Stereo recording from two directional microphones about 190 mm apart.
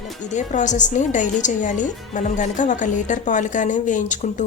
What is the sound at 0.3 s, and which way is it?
Speech, 40° left (ahead or behind).